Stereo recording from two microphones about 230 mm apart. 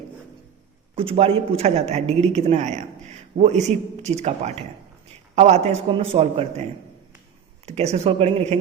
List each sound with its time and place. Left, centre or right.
0.9 s speech: right